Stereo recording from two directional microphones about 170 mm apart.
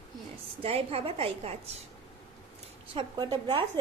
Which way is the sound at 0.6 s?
35° right (ahead or behind).